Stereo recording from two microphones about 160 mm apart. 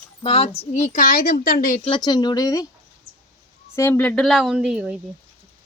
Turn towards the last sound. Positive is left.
turn(degrees=-5)  # may be behind; listen again after turning